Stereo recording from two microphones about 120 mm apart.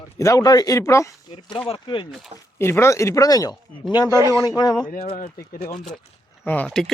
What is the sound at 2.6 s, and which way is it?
Speech, 20° left (ahead or behind).